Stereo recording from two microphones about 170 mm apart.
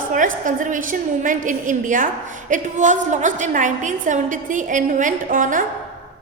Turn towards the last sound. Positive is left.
turn(degrees=-50)  # may be behind; listen again after turning